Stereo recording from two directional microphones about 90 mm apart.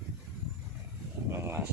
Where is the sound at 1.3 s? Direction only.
30° right (ahead or behind).